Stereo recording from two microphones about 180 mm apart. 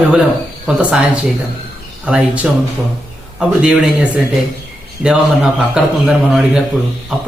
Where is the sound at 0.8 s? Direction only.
5° right (ahead or behind).